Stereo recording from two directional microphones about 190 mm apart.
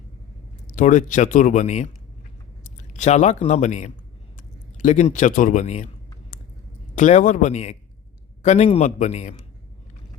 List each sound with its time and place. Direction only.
0.7 s speech: 40° left (ahead or behind)
6.9 s speech: 40° left (ahead or behind)